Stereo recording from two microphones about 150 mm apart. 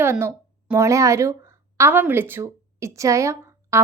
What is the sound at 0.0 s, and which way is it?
A woman's voice, 15° right (ahead or behind).